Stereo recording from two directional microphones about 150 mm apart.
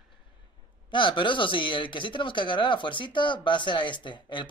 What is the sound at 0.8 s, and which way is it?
Speech, 35° left (ahead or behind).